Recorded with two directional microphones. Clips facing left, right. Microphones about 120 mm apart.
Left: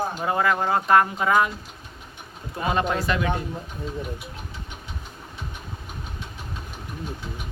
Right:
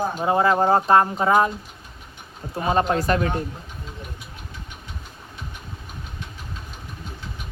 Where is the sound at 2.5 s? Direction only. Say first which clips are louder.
Right 3 dB; 35° right (ahead or behind).